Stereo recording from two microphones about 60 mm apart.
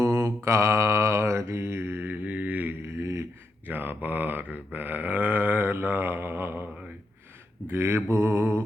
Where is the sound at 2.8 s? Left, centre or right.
Right.